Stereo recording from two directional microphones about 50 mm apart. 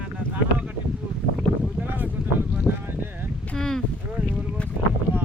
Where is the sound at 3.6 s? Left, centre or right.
Centre.